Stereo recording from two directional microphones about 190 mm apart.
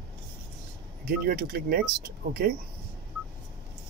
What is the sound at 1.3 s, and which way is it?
Speech, 50° right (ahead or behind).